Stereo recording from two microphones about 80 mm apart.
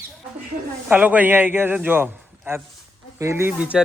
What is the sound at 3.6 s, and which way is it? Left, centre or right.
Speech, centre.